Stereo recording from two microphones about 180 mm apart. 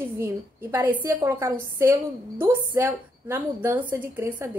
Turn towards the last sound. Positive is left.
turn(degrees=-10)  # may be behind; listen again after turning